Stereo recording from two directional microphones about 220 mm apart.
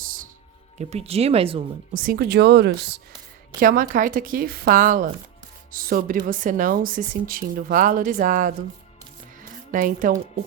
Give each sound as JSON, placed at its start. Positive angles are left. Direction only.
{"t": 0.0, "sound": "music", "side_deg": -40}
{"t": 0.8, "sound": "speech", "side_deg": -30}
{"t": 1.9, "sound": "speech", "side_deg": -40}
{"t": 9.7, "sound": "speech", "side_deg": -40}